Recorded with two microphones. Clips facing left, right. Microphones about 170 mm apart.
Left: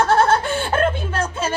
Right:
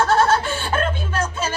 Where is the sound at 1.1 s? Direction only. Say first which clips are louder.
Left 1 dB; 30° left (ahead or behind).